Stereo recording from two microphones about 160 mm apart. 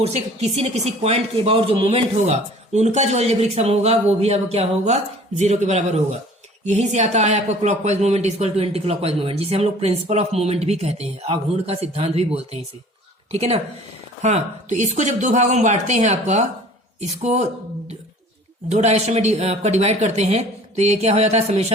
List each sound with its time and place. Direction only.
0.0 s speech: 40° right (ahead or behind)